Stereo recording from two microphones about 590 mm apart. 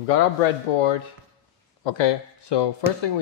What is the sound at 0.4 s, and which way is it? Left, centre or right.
Speech, left.